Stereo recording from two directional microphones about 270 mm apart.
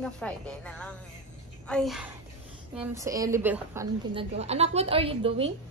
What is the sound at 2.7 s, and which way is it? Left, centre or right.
A woman's voice, centre.